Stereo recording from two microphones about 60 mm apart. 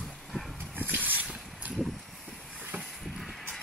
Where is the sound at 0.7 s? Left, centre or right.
Right.